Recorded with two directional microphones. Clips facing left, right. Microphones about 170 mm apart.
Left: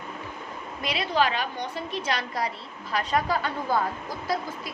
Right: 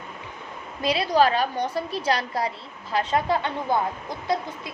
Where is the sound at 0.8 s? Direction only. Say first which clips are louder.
Right 5 dB; 30° right (ahead or behind).